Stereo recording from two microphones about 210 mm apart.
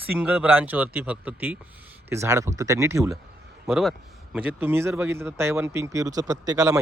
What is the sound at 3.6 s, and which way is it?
Speech, centre (ahead or behind).